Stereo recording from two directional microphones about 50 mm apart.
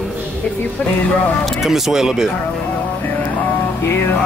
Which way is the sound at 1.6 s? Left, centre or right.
Centre.